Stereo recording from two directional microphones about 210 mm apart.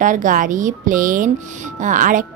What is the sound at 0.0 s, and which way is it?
Speech, 40° right (ahead or behind).